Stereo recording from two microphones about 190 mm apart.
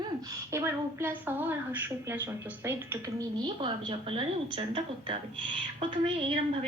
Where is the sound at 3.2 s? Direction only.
25° right (ahead or behind).